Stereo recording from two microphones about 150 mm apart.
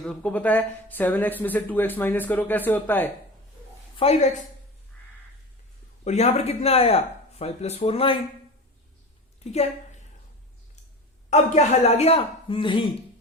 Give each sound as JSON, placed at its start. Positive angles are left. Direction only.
{"t": 0.0, "sound": "speech", "side_deg": 5}
{"t": 3.9, "sound": "speech", "side_deg": 45}
{"t": 6.1, "sound": "speech", "side_deg": 50}
{"t": 9.4, "sound": "a woman's voice", "side_deg": 45}
{"t": 11.3, "sound": "speech", "side_deg": 50}